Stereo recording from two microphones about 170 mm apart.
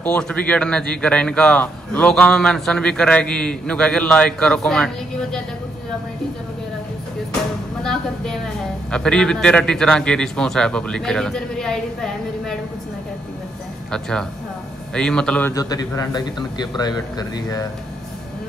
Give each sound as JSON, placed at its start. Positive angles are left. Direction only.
{"t": 0.0, "sound": "a man's voice", "side_deg": 10}
{"t": 7.8, "sound": "a sound", "side_deg": 5}
{"t": 8.9, "sound": "a man's voice", "side_deg": 5}
{"t": 13.9, "sound": "a man's voice", "side_deg": 5}
{"t": 15.5, "sound": "a man's voice", "side_deg": 20}